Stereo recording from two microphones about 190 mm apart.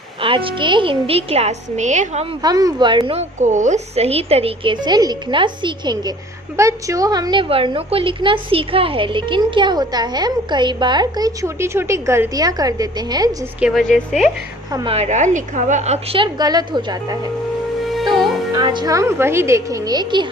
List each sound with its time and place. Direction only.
0.2 s a woman's voice: 30° right (ahead or behind)
2.4 s a woman's voice: 20° right (ahead or behind)
13.6 s a woman's voice: centre (ahead or behind)
14.7 s a woman's voice: 20° right (ahead or behind)
15.0 s a woman's voice: 40° right (ahead or behind); by 17.2 s 20° right (ahead or behind)
17.8 s music: centre (ahead or behind)
18.5 s a woman's voice: 25° right (ahead or behind)